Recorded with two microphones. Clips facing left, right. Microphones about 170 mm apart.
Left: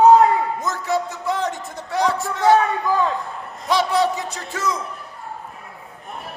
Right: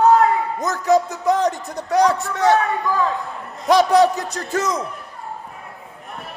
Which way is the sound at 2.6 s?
20° left (ahead or behind).